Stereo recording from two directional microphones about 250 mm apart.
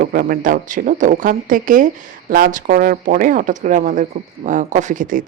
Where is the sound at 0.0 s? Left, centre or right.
Right.